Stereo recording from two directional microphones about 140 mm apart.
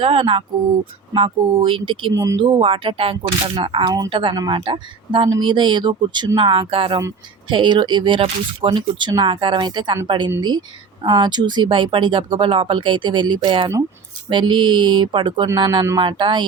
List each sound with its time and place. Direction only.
0.0 s speech: 40° right (ahead or behind)